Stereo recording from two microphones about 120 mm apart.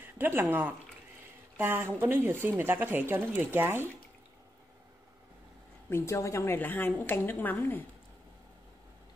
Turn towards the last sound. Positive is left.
turn(degrees=15)  # may be behind; listen again after turning